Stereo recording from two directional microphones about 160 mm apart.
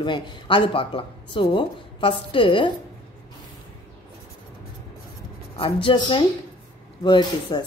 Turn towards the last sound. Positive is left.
turn(degrees=30)  # may be behind; listen again after turning